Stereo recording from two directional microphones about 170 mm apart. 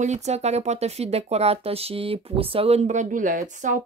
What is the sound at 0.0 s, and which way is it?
Speech, 40° right (ahead or behind).